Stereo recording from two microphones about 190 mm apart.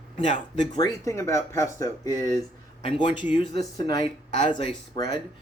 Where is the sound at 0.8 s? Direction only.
15° left (ahead or behind).